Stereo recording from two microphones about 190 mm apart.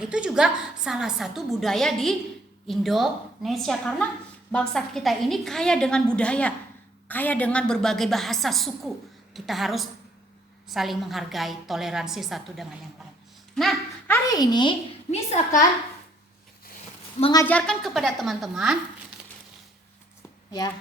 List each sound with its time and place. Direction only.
0.0 s a woman's voice: 5° right (ahead or behind)
14.3 s speech: 20° left (ahead or behind)
17.3 s a woman's voice: 10° left (ahead or behind)
20.5 s speech: 20° left (ahead or behind)